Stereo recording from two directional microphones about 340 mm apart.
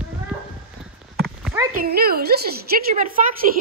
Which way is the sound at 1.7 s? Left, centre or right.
Right.